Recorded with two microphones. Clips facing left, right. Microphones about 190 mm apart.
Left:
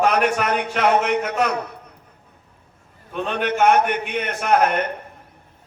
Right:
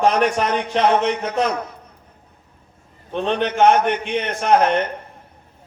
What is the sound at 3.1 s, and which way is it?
A man's voice, 35° right (ahead or behind).